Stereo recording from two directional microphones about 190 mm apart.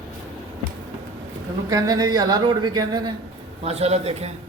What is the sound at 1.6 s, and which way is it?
Speech, 20° right (ahead or behind).